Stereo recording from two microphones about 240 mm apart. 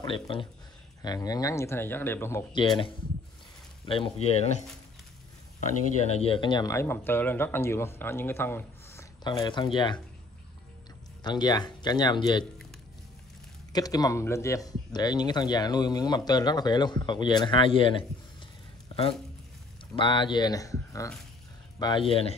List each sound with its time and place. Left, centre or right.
0.3 s speech: left
3.8 s speech: left
6.0 s speech: left
11.2 s speech: centre
13.7 s speech: centre
20.0 s speech: centre
21.7 s speech: centre